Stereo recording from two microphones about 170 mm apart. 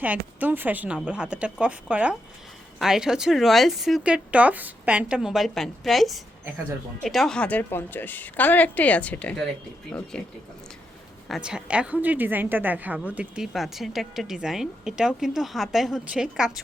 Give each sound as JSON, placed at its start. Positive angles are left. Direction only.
{"t": 0.3, "sound": "a woman's voice", "side_deg": -10}
{"t": 11.3, "sound": "a woman's voice", "side_deg": -5}